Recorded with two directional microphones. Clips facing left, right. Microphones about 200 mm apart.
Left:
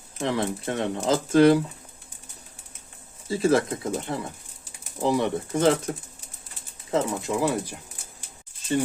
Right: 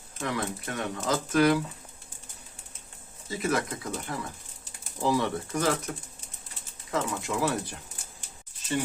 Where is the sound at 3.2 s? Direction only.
30° left (ahead or behind).